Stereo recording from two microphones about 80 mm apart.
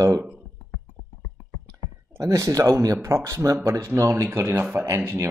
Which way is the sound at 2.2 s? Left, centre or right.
Right.